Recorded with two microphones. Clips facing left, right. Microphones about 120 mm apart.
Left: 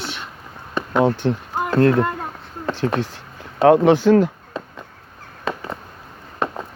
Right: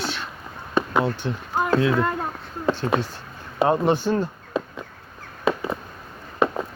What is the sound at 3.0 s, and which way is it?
Speech, 85° left.